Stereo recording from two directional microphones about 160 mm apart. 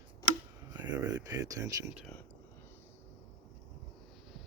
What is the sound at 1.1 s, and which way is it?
Speech, 25° right (ahead or behind).